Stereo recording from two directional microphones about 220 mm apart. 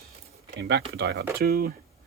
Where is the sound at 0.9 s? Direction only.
50° right (ahead or behind).